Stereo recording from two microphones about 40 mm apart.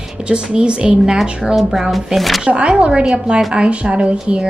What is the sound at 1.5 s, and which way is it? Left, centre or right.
Speech, centre.